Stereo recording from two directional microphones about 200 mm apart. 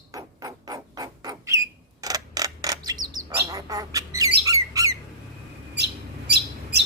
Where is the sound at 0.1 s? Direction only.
20° right (ahead or behind).